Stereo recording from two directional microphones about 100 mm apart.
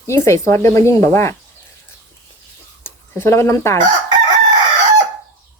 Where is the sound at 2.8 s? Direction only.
25° left (ahead or behind).